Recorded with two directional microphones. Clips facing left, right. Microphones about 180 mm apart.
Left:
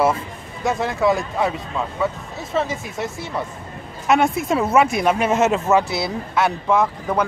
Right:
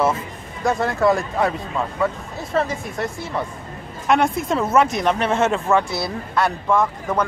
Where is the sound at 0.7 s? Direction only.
Centre (ahead or behind).